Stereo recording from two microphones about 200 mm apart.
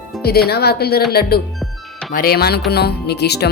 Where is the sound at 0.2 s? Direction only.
50° left (ahead or behind).